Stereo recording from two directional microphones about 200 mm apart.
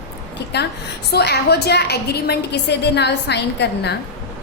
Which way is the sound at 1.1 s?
55° left (ahead or behind).